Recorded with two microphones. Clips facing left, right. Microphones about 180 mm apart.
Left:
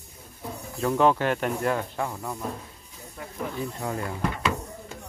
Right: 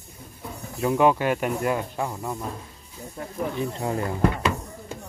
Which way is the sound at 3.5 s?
25° right (ahead or behind).